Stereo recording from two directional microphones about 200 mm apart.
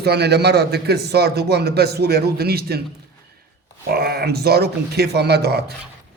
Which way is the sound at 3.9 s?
50° right (ahead or behind).